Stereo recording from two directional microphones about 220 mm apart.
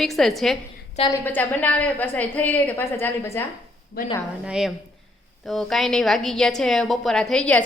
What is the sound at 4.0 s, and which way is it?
Speech, 45° left (ahead or behind).